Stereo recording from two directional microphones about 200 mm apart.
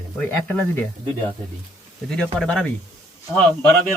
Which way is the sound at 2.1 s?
5° left (ahead or behind).